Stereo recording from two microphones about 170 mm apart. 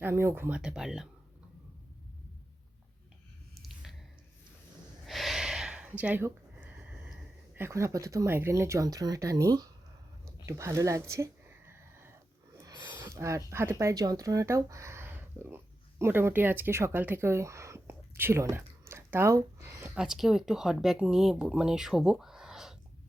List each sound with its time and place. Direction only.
0.0 s speech: 15° right (ahead or behind)
3.5 s a sound: centre (ahead or behind)
5.0 s gasp: centre (ahead or behind); by 9.6 s 20° right (ahead or behind)
10.4 s a sound: 15° right (ahead or behind)
13.0 s speech: 15° right (ahead or behind)
20.0 s speech: centre (ahead or behind)